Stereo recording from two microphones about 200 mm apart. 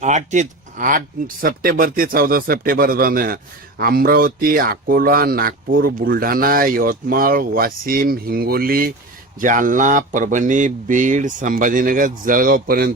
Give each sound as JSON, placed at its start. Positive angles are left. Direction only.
{"t": 0.0, "sound": "speech", "side_deg": -35}